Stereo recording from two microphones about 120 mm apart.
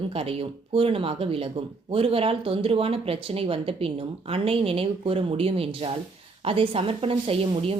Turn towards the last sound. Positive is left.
turn(degrees=-50)  # may be behind; listen again after turning